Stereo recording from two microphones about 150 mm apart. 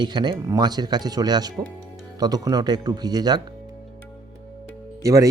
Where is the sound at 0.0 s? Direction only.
30° right (ahead or behind).